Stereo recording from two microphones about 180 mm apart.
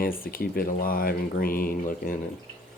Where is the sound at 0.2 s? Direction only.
55° left (ahead or behind).